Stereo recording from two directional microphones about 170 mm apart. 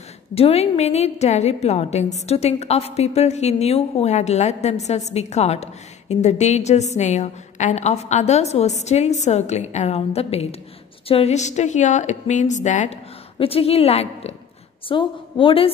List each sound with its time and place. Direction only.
0.3 s a woman's voice: 35° left (ahead or behind)